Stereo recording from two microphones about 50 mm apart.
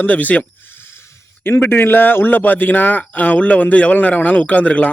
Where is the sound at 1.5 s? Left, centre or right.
Left.